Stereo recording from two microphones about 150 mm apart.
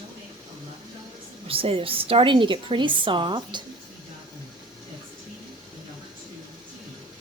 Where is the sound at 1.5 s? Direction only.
40° right (ahead or behind).